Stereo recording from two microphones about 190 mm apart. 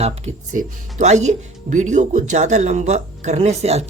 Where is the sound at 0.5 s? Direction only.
40° right (ahead or behind).